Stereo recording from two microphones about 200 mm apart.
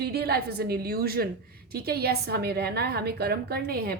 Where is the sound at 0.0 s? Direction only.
50° right (ahead or behind).